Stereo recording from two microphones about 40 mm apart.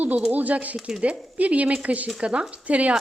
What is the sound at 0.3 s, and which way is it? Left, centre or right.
Speech, right.